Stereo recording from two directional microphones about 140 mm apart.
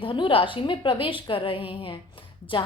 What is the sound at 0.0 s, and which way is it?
A woman's voice, 35° left (ahead or behind).